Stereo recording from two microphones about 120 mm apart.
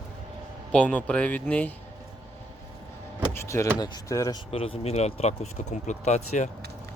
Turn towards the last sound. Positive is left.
turn(degrees=75)  # may be behind; listen again after turning